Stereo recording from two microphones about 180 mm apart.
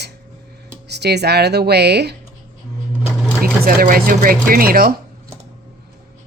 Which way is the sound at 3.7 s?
55° right (ahead or behind).